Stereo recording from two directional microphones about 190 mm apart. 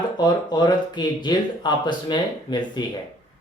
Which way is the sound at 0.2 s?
20° left (ahead or behind).